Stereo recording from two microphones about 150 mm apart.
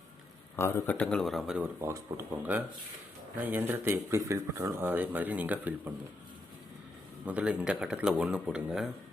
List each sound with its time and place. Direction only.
0.5 s speech: 15° left (ahead or behind); by 1.6 s centre (ahead or behind)
1.8 s speech: 20° right (ahead or behind)
7.3 s speech: 10° right (ahead or behind)